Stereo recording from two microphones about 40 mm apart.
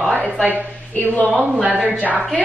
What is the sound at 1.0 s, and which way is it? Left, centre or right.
Speech, left.